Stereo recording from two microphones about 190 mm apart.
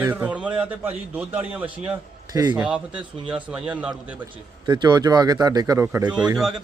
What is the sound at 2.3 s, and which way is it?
Speech, 20° right (ahead or behind).